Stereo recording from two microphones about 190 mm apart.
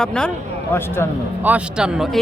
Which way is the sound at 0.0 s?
5° left (ahead or behind).